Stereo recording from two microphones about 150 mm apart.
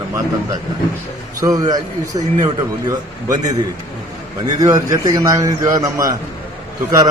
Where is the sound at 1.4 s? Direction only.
25° right (ahead or behind).